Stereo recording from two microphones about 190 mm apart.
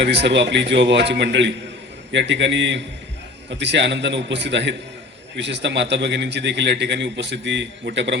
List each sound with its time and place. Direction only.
0.0 s a man's voice: 65° right (ahead or behind)